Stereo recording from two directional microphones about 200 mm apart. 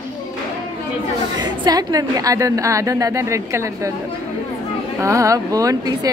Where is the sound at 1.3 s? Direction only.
20° right (ahead or behind).